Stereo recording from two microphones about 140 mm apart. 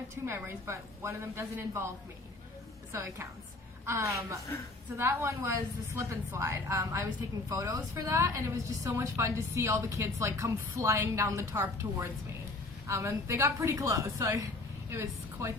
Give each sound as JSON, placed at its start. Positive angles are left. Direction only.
{"t": 0.3, "sound": "a woman's voice", "side_deg": -20}
{"t": 2.9, "sound": "a woman's voice", "side_deg": -20}